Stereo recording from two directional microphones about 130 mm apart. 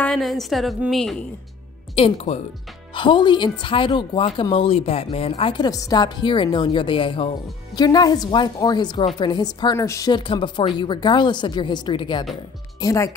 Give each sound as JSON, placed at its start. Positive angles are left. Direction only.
{"t": 0.0, "sound": "a woman's voice", "side_deg": 5}
{"t": 2.0, "sound": "speech", "side_deg": 50}
{"t": 2.9, "sound": "speech", "side_deg": 40}
{"t": 12.8, "sound": "speech", "side_deg": 25}